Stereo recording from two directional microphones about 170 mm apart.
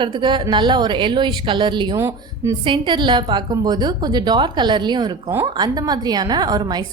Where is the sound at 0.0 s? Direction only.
30° right (ahead or behind).